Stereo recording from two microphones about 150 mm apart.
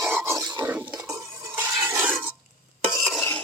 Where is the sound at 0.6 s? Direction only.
10° right (ahead or behind).